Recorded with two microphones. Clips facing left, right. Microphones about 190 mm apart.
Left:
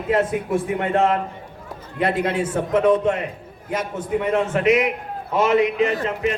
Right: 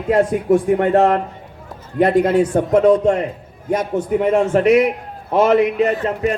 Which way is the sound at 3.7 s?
45° right (ahead or behind).